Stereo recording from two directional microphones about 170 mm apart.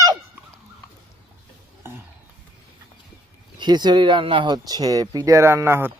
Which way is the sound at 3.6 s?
25° right (ahead or behind).